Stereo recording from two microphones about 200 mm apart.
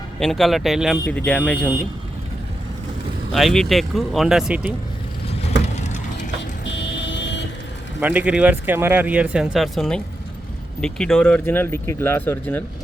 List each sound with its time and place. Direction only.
0.2 s speech: centre (ahead or behind)
3.3 s speech: centre (ahead or behind)
5.4 s vehicle: 30° left (ahead or behind)
6.7 s vehicle: 60° left (ahead or behind)
8.0 s speech: 5° right (ahead or behind); by 12.6 s 10° left (ahead or behind)